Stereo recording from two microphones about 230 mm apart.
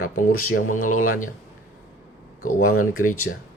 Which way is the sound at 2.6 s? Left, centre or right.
Left.